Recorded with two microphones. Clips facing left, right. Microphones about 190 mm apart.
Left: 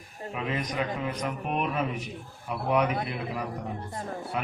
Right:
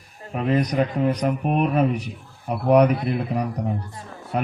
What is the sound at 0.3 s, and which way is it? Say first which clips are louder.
A man's voice: right 10 dB; 45° right (ahead or behind).